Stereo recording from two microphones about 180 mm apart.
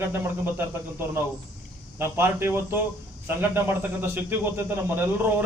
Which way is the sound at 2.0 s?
15° right (ahead or behind).